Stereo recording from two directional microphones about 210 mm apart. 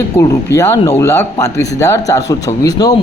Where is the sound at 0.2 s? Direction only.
15° left (ahead or behind).